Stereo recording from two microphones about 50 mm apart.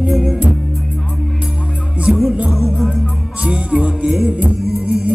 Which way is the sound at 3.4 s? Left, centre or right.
Right.